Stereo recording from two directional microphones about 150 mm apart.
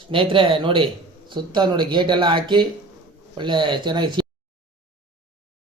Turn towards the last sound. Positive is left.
turn(degrees=-30)  # may be behind; listen again after turning